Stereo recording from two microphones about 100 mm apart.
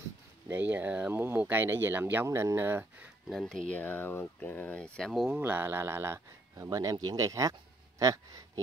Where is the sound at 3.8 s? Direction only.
20° left (ahead or behind); by 5.3 s 5° left (ahead or behind).